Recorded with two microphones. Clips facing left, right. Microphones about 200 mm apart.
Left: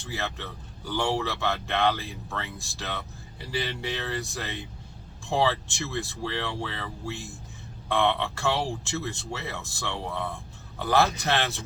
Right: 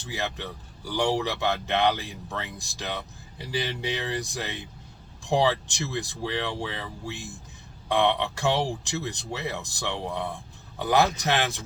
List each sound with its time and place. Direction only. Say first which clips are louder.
0.1 s a man's voice: right 2 dB; 15° right (ahead or behind)